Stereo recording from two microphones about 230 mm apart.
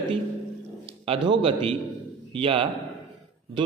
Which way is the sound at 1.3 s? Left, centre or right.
Right.